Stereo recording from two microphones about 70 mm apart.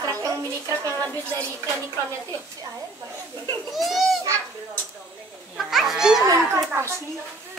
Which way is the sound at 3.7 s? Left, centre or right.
Centre.